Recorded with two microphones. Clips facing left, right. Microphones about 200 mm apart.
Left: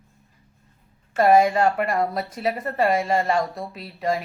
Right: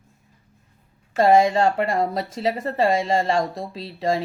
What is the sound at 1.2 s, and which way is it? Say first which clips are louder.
Speech: right 1 dB; 25° right (ahead or behind).